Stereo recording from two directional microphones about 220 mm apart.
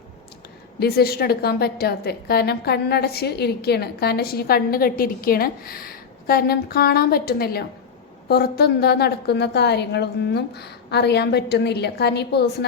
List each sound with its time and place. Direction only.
0.8 s a woman's voice: 45° left (ahead or behind)